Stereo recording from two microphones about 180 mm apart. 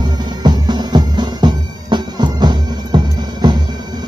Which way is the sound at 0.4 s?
25° right (ahead or behind).